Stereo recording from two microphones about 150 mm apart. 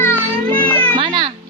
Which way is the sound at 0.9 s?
35° right (ahead or behind).